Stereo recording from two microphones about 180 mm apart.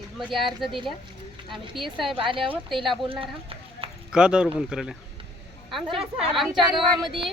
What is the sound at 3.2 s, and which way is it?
Run, 30° right (ahead or behind).